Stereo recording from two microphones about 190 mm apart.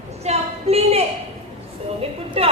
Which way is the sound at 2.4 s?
30° right (ahead or behind).